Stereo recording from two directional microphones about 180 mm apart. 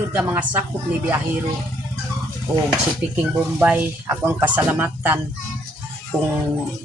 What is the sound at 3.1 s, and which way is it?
Speech, 5° right (ahead or behind).